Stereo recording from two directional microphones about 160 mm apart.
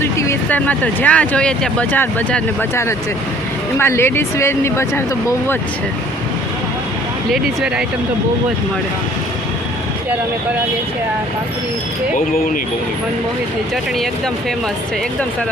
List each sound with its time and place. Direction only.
0.0 s speech: 15° left (ahead or behind)
7.3 s speech: centre (ahead or behind)